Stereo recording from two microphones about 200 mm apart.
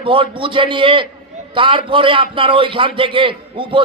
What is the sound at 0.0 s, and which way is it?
Speech, 25° right (ahead or behind).